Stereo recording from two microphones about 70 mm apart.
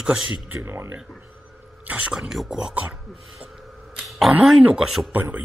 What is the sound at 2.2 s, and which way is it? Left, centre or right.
Speech, centre.